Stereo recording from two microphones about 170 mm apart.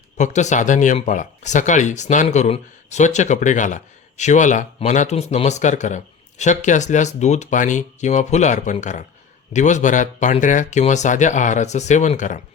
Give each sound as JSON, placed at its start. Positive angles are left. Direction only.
{"t": 0.2, "sound": "speech", "side_deg": 45}